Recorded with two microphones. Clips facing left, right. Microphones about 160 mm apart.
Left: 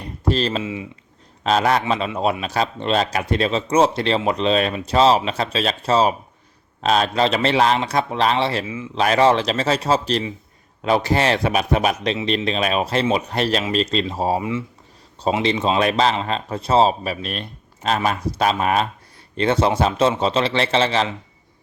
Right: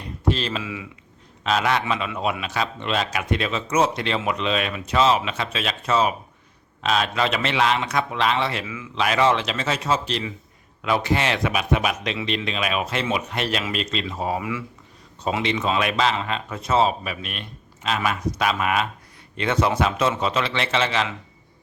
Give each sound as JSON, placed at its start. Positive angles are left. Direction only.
{"t": 0.3, "sound": "a man's voice", "side_deg": 40}
{"t": 0.6, "sound": "speech", "side_deg": 25}
{"t": 1.5, "sound": "a man's voice", "side_deg": 40}